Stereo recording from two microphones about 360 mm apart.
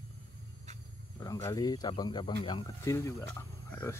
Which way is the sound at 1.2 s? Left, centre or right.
Centre.